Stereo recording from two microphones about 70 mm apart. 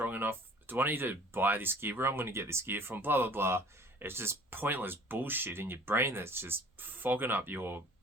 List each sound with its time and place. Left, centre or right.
0.0 s speech: right